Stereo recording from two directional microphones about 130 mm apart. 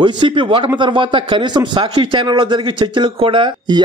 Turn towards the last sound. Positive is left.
turn(degrees=-35)  # may be behind; listen again after turning